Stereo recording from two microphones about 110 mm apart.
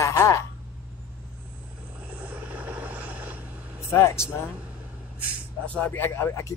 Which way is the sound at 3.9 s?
25° left (ahead or behind).